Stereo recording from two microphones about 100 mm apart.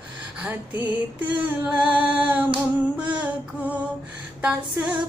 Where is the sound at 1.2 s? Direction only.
15° right (ahead or behind).